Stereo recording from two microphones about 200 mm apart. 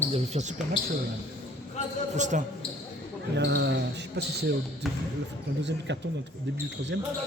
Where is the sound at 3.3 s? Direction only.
60° right (ahead or behind).